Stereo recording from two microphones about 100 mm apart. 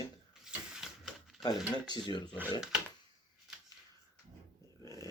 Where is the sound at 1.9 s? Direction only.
45° left (ahead or behind).